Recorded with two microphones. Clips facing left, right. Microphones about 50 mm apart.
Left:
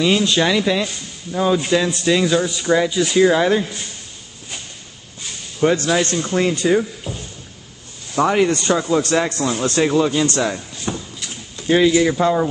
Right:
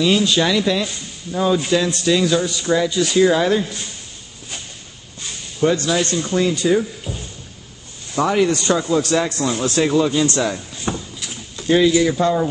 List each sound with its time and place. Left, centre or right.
0.4 s a man's voice: centre
5.6 s speech: left
8.2 s a man's voice: centre
10.9 s a sound: right
11.6 s speech: centre